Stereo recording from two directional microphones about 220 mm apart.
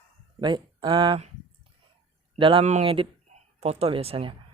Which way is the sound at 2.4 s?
25° right (ahead or behind).